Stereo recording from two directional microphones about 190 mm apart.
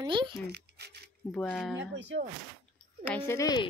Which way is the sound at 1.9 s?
70° right (ahead or behind).